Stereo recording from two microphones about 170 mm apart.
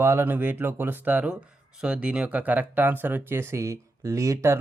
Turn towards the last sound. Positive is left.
turn(degrees=-15)  # may be behind; listen again after turning